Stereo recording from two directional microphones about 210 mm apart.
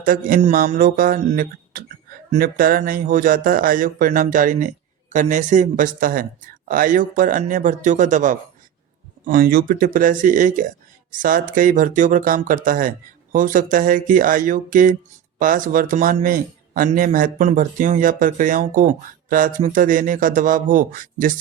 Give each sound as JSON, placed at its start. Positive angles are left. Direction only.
{"t": 0.0, "sound": "a man's voice", "side_deg": -40}